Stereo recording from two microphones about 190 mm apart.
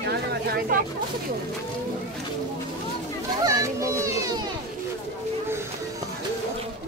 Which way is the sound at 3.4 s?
15° right (ahead or behind).